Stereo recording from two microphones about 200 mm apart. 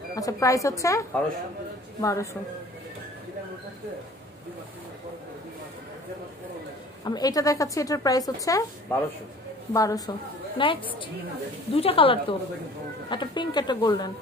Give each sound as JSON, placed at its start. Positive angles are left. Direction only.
{"t": 0.1, "sound": "a woman's voice", "side_deg": 15}
{"t": 7.1, "sound": "a woman's voice", "side_deg": 20}
{"t": 9.7, "sound": "a woman's voice", "side_deg": 15}